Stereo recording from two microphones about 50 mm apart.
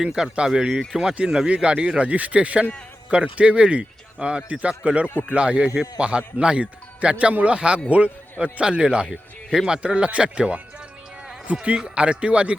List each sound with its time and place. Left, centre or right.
0.0 s a man's voice: centre
9.0 s speech: centre
9.6 s speech: centre
11.5 s speech: right